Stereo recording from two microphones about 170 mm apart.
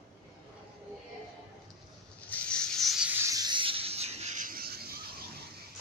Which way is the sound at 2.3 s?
5° left (ahead or behind).